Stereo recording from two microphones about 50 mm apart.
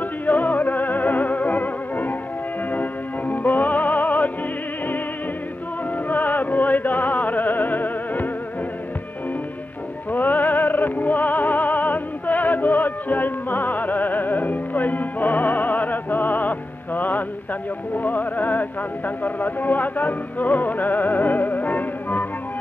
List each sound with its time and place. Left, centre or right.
0.0 s music: left
6.0 s music: left
10.1 s music: left